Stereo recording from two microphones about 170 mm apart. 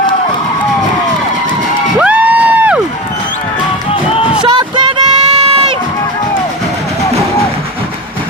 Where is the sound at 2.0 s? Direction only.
10° right (ahead or behind).